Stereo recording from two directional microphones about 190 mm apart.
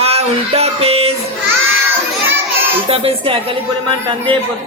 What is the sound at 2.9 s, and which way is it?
Speech, 30° right (ahead or behind).